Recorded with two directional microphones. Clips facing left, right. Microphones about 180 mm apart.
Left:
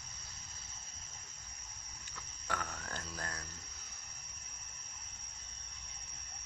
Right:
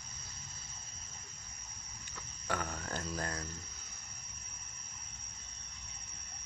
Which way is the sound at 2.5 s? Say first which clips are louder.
Right 4 dB; 25° right (ahead or behind).